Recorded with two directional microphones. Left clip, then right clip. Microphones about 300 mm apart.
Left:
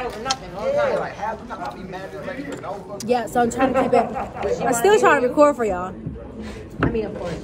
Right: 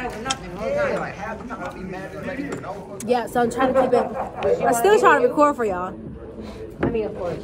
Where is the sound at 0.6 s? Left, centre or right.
Left.